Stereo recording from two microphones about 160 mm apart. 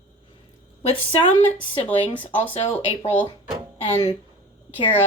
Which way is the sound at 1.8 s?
10° left (ahead or behind).